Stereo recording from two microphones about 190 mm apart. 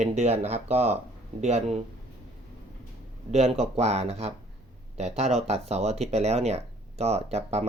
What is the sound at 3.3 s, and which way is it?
Speech, 35° right (ahead or behind).